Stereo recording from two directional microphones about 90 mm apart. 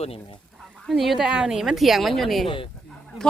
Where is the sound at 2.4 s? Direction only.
75° left (ahead or behind).